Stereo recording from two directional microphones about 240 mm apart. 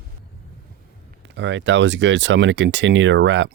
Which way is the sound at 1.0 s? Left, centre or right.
Right.